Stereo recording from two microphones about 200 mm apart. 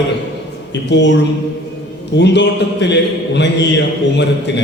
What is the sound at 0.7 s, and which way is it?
Speech, 60° left (ahead or behind).